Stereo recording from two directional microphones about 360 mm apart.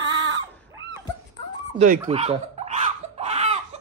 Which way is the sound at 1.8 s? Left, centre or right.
Centre.